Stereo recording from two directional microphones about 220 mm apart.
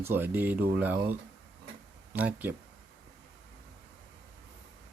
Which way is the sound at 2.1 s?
5° right (ahead or behind).